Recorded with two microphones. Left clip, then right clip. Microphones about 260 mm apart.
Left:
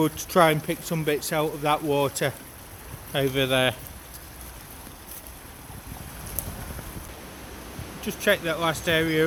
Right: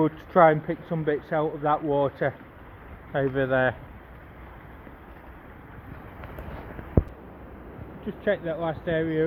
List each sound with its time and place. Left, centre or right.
0.0 s speech: centre
8.0 s speech: centre